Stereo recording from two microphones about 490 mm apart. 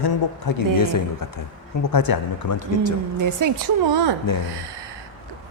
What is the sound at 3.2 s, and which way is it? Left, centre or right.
Speech, right.